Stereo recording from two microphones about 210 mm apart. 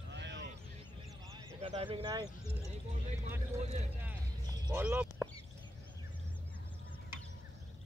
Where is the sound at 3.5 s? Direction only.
30° right (ahead or behind).